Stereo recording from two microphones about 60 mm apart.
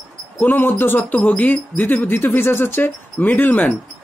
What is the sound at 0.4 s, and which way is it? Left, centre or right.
Speech, left.